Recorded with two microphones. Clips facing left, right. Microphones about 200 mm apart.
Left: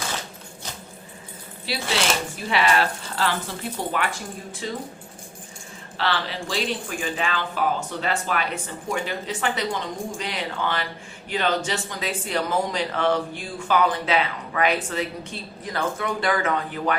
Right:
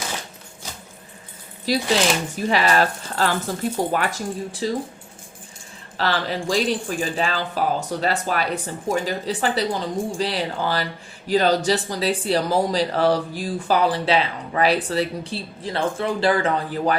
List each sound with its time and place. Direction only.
1.7 s speech: 40° right (ahead or behind)
6.0 s speech: 45° right (ahead or behind)